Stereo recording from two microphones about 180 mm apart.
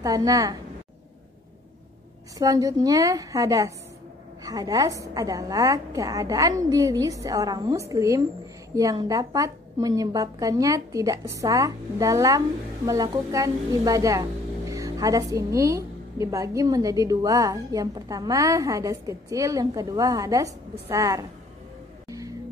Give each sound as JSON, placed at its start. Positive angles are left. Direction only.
{"t": 0.0, "sound": "a woman's voice", "side_deg": -20}
{"t": 2.3, "sound": "a woman's voice", "side_deg": -20}